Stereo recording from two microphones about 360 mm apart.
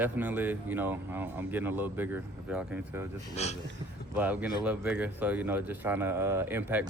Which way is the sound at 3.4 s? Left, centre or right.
Centre.